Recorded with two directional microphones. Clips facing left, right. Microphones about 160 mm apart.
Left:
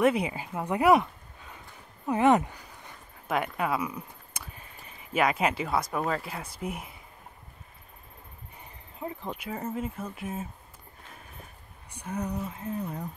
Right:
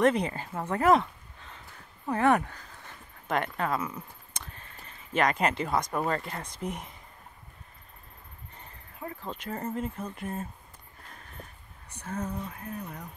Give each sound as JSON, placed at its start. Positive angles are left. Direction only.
{"t": 0.0, "sound": "speech", "side_deg": 10}
{"t": 2.0, "sound": "speech", "side_deg": 15}
{"t": 8.5, "sound": "speech", "side_deg": 15}
{"t": 11.9, "sound": "speech", "side_deg": 15}